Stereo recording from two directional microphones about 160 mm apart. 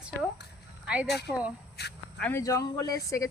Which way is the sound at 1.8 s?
90° left.